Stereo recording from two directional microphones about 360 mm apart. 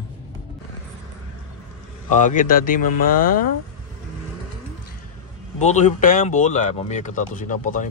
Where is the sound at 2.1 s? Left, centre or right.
Left.